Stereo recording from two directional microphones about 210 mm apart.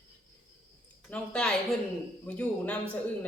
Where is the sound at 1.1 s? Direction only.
5° left (ahead or behind).